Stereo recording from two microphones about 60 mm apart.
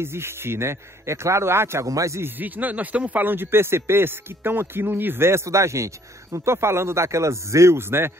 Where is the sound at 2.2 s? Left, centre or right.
Right.